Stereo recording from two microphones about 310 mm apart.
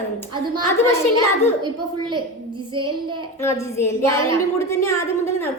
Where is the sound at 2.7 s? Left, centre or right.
Centre.